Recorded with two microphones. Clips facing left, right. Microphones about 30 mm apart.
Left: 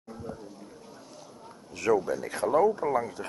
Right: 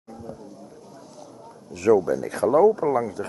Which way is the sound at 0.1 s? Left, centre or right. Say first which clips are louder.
Right 2 dB; centre.